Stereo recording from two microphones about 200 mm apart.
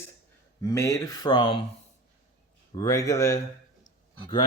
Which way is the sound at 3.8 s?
25° left (ahead or behind).